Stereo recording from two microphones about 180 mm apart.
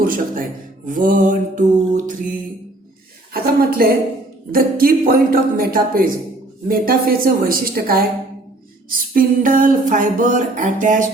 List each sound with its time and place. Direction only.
0.0 s speech: 50° right (ahead or behind)
0.9 s music: 50° right (ahead or behind)
3.3 s a woman's voice: 55° right (ahead or behind)
4.5 s music: 55° right (ahead or behind)